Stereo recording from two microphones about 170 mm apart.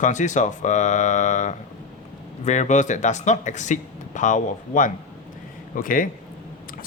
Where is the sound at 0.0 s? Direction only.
45° left (ahead or behind).